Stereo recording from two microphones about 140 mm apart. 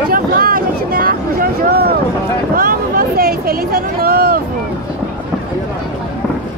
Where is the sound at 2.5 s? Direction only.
90° right.